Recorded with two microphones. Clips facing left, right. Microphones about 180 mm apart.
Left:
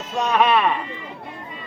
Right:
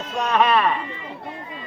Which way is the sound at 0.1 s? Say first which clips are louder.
Left 1 dB; 10° left (ahead or behind).